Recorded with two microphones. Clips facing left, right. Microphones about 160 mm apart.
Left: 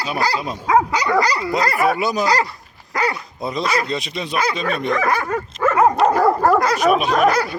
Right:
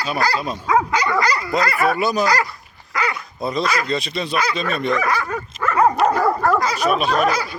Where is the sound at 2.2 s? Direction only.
30° left (ahead or behind).